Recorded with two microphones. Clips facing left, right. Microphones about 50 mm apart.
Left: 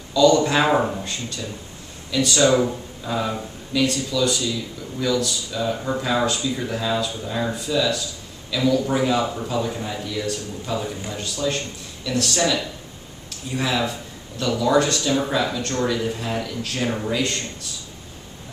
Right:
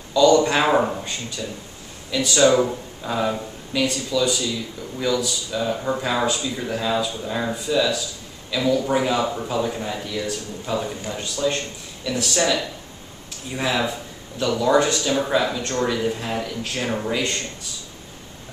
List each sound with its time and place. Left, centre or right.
0.1 s speech: centre